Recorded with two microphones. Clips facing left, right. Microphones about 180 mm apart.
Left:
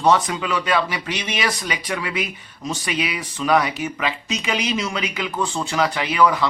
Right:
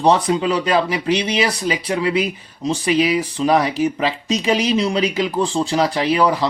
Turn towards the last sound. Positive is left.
turn(degrees=-35)  # may be behind; listen again after turning